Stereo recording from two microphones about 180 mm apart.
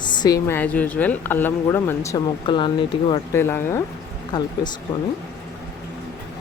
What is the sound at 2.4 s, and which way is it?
Speech, 25° left (ahead or behind).